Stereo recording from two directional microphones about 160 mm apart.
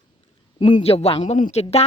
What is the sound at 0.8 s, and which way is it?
A woman's voice, 40° left (ahead or behind).